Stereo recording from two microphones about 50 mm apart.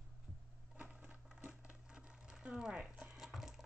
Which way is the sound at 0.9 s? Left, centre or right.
Right.